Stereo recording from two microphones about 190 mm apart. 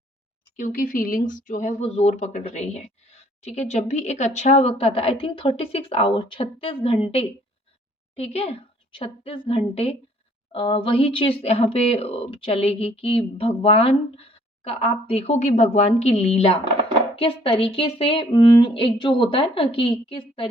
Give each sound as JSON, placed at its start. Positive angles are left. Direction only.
{"t": 0.5, "sound": "speech", "side_deg": 45}